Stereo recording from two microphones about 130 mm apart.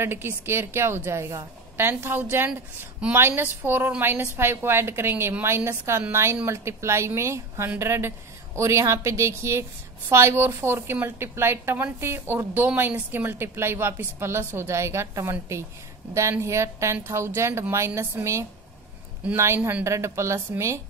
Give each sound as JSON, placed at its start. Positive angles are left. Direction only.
{"t": 0.0, "sound": "a woman's voice", "side_deg": -20}